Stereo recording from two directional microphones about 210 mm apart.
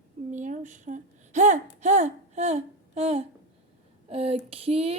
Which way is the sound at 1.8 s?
35° right (ahead or behind).